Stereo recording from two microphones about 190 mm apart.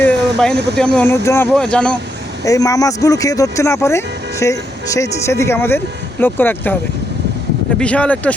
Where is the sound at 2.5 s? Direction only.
20° left (ahead or behind).